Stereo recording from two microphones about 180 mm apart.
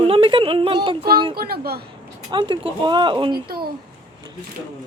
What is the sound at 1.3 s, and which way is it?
Speech, 60° right (ahead or behind).